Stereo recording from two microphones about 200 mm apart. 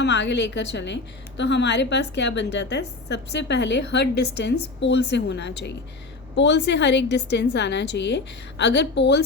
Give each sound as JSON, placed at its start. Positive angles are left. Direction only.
{"t": 0.0, "sound": "a woman's voice", "side_deg": 60}